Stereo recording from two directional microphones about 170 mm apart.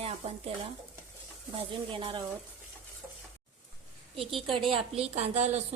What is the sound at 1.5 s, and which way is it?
Speech, 30° right (ahead or behind).